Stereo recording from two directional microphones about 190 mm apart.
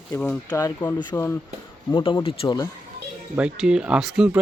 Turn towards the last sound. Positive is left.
turn(degrees=0)  # may be behind; listen again after turning